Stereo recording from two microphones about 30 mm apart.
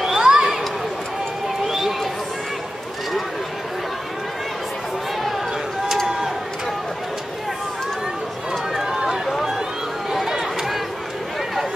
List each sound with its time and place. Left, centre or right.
0.0 s a sound: centre
1.7 s run: centre
8.8 s run: right
10.1 s chatter: centre